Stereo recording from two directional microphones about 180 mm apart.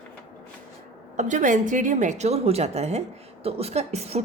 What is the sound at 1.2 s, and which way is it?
A woman's voice, 45° right (ahead or behind).